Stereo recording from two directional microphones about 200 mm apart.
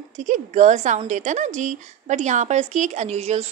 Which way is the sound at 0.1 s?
35° right (ahead or behind).